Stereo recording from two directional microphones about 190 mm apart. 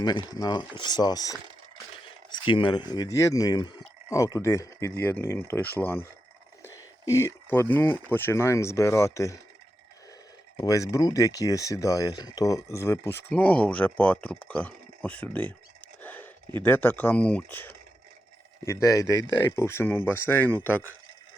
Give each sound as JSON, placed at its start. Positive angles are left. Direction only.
{"t": 0.0, "sound": "speech", "side_deg": 20}
{"t": 2.0, "sound": "a sound", "side_deg": 25}
{"t": 2.9, "sound": "speech", "side_deg": 20}
{"t": 10.6, "sound": "speech", "side_deg": 20}
{"t": 16.0, "sound": "a sound", "side_deg": 10}
{"t": 16.6, "sound": "speech", "side_deg": 10}